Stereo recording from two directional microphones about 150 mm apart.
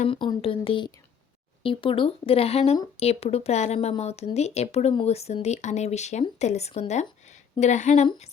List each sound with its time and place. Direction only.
0.1 s a woman's voice: 35° left (ahead or behind); by 8.0 s 50° left (ahead or behind)